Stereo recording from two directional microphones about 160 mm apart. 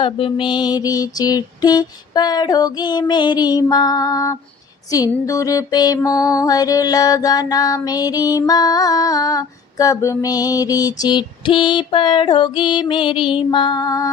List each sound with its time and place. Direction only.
0.0 s music: 30° left (ahead or behind)